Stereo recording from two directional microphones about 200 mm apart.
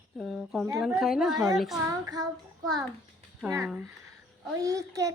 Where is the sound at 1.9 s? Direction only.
20° right (ahead or behind).